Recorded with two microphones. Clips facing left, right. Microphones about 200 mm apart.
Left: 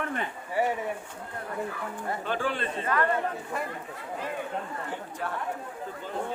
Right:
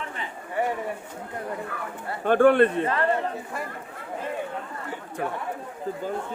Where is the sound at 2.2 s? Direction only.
55° right (ahead or behind).